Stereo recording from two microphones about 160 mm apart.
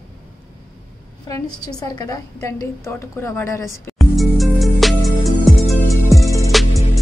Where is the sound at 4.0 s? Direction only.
Centre (ahead or behind).